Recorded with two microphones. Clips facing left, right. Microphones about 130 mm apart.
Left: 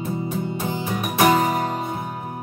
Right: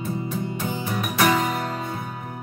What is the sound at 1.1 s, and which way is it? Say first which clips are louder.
Music: left 4 dB; 35° left (ahead or behind).